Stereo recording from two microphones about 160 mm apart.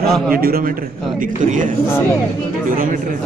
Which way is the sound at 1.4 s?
50° right (ahead or behind).